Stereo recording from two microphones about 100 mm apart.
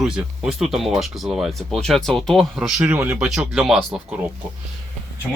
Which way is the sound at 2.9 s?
15° right (ahead or behind).